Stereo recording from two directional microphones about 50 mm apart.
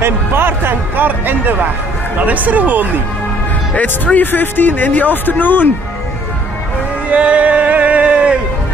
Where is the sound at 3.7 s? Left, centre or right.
Left.